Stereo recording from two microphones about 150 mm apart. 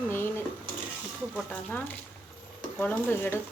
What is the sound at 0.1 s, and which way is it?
Dishes, 15° left (ahead or behind).